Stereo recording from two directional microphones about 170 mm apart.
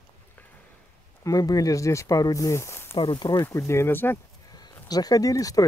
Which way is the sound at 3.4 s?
15° left (ahead or behind).